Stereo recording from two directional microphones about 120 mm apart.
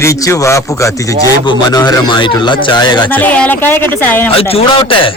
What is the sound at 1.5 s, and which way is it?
Speech, 40° left (ahead or behind).